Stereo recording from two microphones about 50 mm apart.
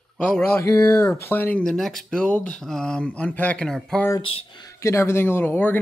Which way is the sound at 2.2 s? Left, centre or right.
Left.